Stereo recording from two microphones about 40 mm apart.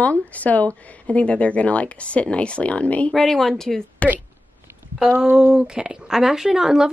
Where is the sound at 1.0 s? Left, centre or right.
Left.